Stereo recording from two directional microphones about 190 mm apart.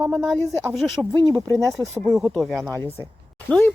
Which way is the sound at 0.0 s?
15° right (ahead or behind).